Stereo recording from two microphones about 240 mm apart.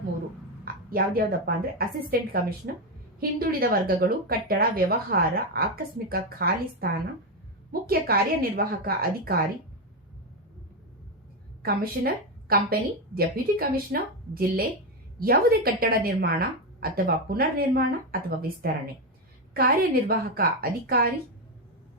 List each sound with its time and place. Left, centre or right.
0.6 s speech: right
11.6 s a woman's voice: right